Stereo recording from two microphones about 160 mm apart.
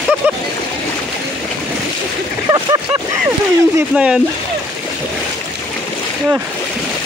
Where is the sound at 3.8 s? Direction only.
5° right (ahead or behind).